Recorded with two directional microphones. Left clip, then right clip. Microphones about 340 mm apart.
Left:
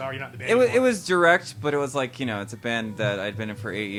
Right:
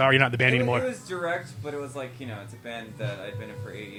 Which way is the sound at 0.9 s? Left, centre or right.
Left.